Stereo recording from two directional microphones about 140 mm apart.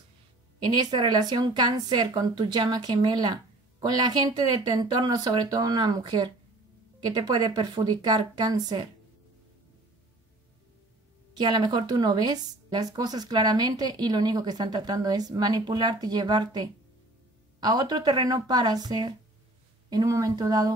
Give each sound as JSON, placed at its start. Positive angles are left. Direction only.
{"t": 0.6, "sound": "speech", "side_deg": -30}
{"t": 11.3, "sound": "speech", "side_deg": -30}